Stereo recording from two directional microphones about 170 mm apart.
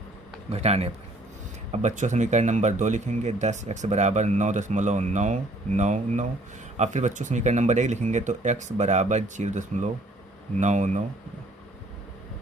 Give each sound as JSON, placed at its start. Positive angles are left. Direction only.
{"t": 0.5, "sound": "a man's voice", "side_deg": -40}